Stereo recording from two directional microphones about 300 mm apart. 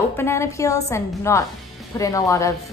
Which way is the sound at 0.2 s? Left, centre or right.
Centre.